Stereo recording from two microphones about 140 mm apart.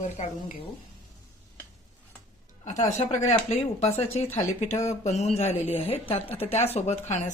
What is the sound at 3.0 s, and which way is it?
A woman's voice, 55° left (ahead or behind).